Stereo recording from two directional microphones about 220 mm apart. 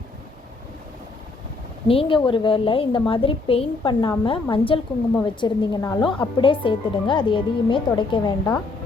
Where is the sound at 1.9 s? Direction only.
25° left (ahead or behind).